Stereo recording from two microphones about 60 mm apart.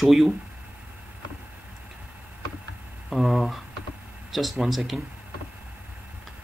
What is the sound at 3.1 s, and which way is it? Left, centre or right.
Speech, centre.